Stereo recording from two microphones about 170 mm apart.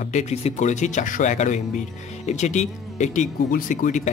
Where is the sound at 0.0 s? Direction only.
45° left (ahead or behind).